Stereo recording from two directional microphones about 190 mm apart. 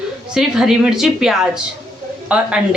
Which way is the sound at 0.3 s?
5° right (ahead or behind).